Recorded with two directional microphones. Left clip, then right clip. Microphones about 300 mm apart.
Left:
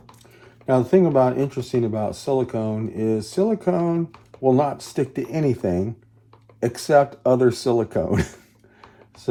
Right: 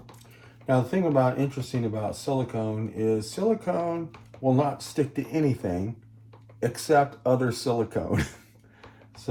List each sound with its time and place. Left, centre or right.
0.7 s speech: left